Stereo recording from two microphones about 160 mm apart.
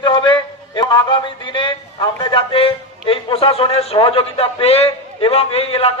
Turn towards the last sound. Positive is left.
turn(degrees=40)  # may be behind; listen again after turning